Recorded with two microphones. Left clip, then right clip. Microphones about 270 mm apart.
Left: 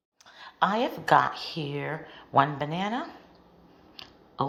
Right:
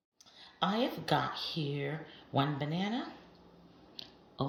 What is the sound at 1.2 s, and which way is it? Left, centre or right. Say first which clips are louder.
Speech: left 6 dB; centre.